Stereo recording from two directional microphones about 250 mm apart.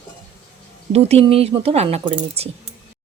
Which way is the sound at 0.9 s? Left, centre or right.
Right.